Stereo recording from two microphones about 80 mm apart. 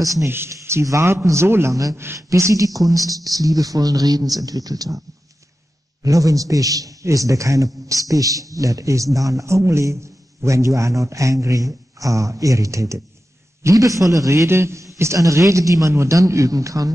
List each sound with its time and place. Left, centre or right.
0.0 s a man's voice: right
0.3 s a man's voice: right
6.0 s a man's voice: right